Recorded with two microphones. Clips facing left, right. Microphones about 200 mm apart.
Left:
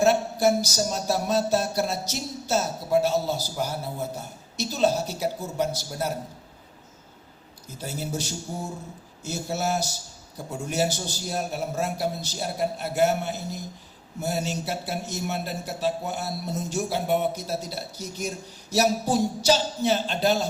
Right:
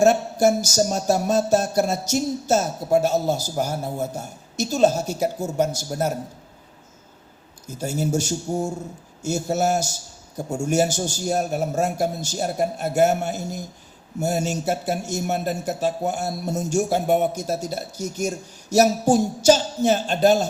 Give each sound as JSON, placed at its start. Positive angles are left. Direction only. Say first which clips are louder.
{"t": 0.0, "sound": "a man's voice", "louder": "right 4 dB", "side_deg": -45}
{"t": 7.7, "sound": "a man's voice", "louder": "right 8 dB", "side_deg": -45}